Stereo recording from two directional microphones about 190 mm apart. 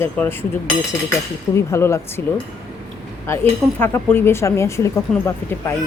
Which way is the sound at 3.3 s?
15° left (ahead or behind).